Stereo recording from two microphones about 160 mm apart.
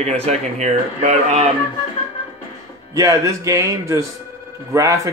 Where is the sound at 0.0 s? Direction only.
40° right (ahead or behind).